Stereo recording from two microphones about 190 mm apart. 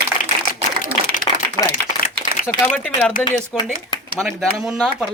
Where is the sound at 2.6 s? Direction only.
5° left (ahead or behind).